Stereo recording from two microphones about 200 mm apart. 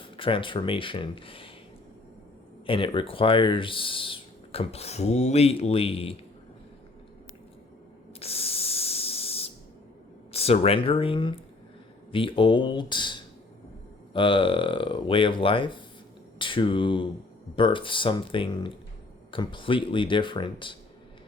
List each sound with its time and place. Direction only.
0.0 s speech: 25° left (ahead or behind)
2.6 s speech: 25° left (ahead or behind)
8.2 s spray: 30° left (ahead or behind)
10.3 s speech: 30° left (ahead or behind)